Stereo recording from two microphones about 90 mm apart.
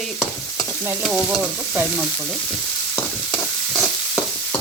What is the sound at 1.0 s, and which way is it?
Stir, 5° right (ahead or behind).